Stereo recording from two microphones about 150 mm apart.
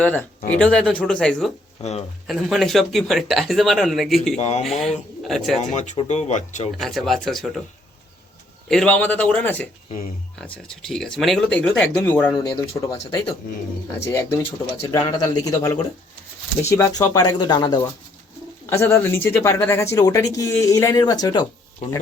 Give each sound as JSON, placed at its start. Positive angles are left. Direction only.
{"t": 0.0, "sound": "speech", "side_deg": 10}
{"t": 1.8, "sound": "speech", "side_deg": 45}
{"t": 2.2, "sound": "speech", "side_deg": 0}
{"t": 4.4, "sound": "speech", "side_deg": 45}
{"t": 4.8, "sound": "speech", "side_deg": 0}
{"t": 5.7, "sound": "speech", "side_deg": 55}
{"t": 6.7, "sound": "speech", "side_deg": 0}
{"t": 8.7, "sound": "speech", "side_deg": 5}
{"t": 18.6, "sound": "speech", "side_deg": 20}